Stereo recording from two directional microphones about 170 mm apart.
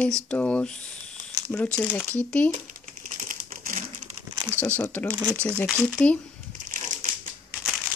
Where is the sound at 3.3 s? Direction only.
50° right (ahead or behind).